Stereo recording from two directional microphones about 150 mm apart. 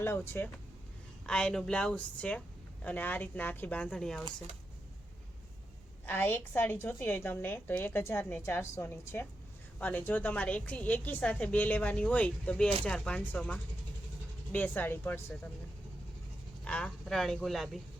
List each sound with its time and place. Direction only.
0.0 s a woman's voice: 15° left (ahead or behind)
1.3 s a woman's voice: 5° left (ahead or behind)
6.1 s a woman's voice: 10° left (ahead or behind)
16.6 s speech: 10° left (ahead or behind)